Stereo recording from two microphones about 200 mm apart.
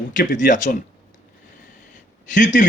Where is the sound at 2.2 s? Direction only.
40° left (ahead or behind).